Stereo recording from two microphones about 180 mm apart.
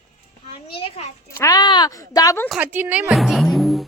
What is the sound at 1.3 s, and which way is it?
Speech, 15° left (ahead or behind).